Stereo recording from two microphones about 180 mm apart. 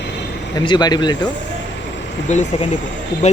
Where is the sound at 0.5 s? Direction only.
25° left (ahead or behind).